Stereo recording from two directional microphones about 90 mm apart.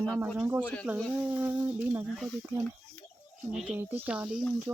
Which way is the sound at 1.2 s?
15° right (ahead or behind).